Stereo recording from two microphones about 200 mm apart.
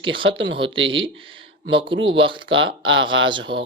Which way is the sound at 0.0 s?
25° right (ahead or behind).